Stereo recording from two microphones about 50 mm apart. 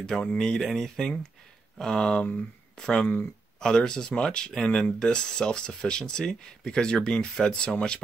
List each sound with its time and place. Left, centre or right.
0.2 s speech: centre